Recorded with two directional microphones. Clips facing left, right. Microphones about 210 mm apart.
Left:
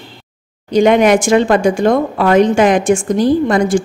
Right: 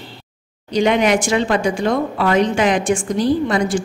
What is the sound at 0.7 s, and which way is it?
A woman's voice, 50° left (ahead or behind).